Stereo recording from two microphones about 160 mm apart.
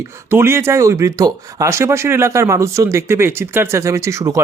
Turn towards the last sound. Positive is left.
turn(degrees=-20)  # may be behind; listen again after turning